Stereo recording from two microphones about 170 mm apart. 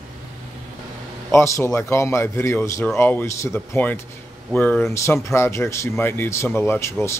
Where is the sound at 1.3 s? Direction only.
15° left (ahead or behind).